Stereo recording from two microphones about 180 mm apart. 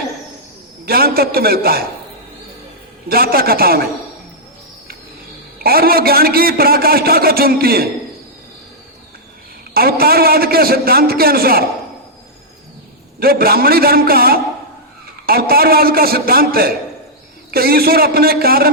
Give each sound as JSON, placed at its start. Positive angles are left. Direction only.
{"t": 0.9, "sound": "a man's voice", "side_deg": -55}
{"t": 3.1, "sound": "a man's voice", "side_deg": -55}
{"t": 5.5, "sound": "a man's voice", "side_deg": -55}
{"t": 9.7, "sound": "a man's voice", "side_deg": -55}
{"t": 13.1, "sound": "a man's voice", "side_deg": -55}